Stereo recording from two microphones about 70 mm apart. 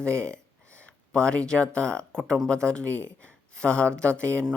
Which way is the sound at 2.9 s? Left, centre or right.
Centre.